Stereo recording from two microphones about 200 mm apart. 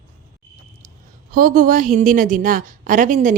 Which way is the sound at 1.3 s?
45° right (ahead or behind).